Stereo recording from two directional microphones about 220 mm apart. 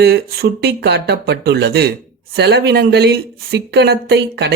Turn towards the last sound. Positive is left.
turn(degrees=-50)  # may be behind; listen again after turning